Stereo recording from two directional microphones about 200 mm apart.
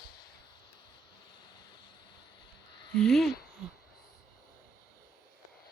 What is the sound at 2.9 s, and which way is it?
Speech, 5° left (ahead or behind).